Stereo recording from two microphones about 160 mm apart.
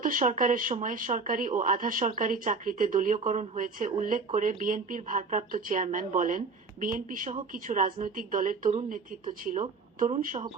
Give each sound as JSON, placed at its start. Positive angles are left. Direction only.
{"t": 0.0, "sound": "speech", "side_deg": -55}